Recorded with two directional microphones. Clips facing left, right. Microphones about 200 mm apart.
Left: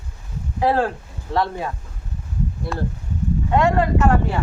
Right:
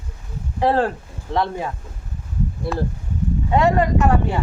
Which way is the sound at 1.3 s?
15° right (ahead or behind).